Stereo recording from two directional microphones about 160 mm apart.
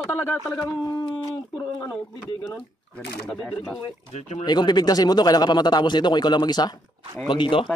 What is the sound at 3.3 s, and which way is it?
Speech, centre (ahead or behind).